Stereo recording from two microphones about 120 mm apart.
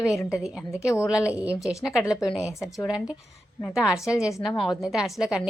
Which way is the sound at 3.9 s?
25° left (ahead or behind).